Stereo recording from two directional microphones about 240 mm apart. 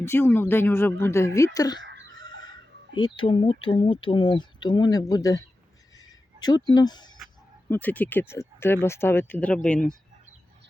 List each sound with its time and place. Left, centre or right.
0.0 s speech: centre
3.0 s speech: left
6.0 s a sound: centre
6.7 s speech: centre
7.7 s speech: centre